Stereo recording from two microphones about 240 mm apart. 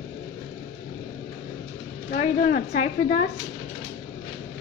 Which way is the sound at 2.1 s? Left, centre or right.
Left.